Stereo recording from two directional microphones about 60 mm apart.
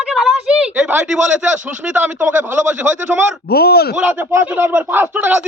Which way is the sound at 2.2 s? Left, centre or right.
Right.